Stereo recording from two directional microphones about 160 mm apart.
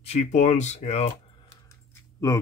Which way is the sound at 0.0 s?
45° left (ahead or behind).